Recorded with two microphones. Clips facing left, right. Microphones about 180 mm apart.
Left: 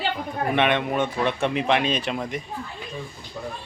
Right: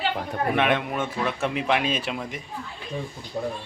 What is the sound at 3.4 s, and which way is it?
Speech, 35° right (ahead or behind).